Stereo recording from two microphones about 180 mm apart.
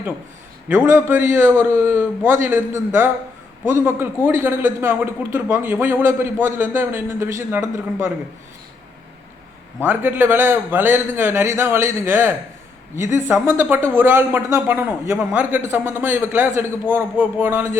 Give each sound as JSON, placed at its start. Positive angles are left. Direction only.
{"t": 0.7, "sound": "speech", "side_deg": -15}
{"t": 9.8, "sound": "speech", "side_deg": -10}